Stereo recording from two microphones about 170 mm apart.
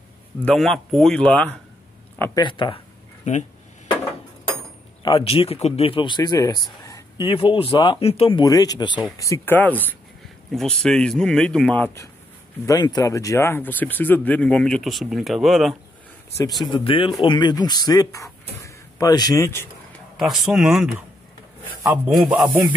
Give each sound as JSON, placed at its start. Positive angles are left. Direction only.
{"t": 0.4, "sound": "speech", "side_deg": 5}
{"t": 2.3, "sound": "speech", "side_deg": 30}
{"t": 3.3, "sound": "speech", "side_deg": 45}
{"t": 5.2, "sound": "speech", "side_deg": 35}
{"t": 16.6, "sound": "speech", "side_deg": 30}
{"t": 20.2, "sound": "speech", "side_deg": 0}
{"t": 21.9, "sound": "a man's voice", "side_deg": -10}